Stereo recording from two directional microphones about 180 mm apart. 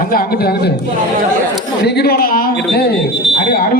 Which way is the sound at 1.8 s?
65° left (ahead or behind).